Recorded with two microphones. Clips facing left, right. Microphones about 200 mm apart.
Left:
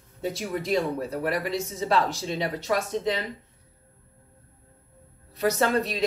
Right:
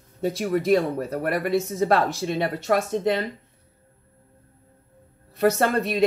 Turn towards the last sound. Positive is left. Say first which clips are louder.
# right 3 dB
turn(degrees=-55)  # may be behind; listen again after turning